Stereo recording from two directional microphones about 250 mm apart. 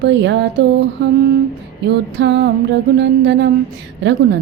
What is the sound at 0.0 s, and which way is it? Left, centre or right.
Speech, right.